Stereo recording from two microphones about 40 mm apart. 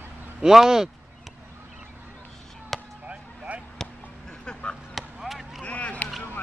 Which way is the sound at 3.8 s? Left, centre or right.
Centre.